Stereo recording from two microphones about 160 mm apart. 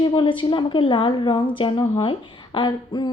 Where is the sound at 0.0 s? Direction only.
30° left (ahead or behind).